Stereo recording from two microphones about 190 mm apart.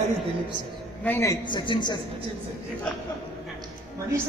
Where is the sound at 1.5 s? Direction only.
25° left (ahead or behind).